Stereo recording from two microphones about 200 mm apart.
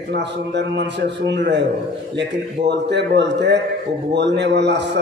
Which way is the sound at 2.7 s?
60° right (ahead or behind).